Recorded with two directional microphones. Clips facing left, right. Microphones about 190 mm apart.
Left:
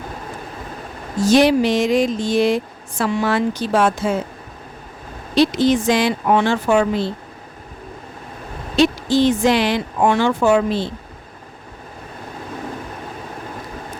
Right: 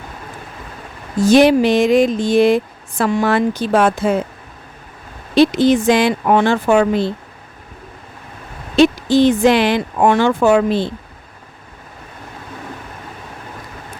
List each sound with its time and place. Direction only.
1.3 s speech: 55° right (ahead or behind)
5.3 s speech: 55° right (ahead or behind)
8.7 s speech: 55° right (ahead or behind)